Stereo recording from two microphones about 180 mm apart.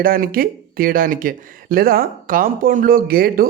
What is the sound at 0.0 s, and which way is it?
Speech, 55° right (ahead or behind).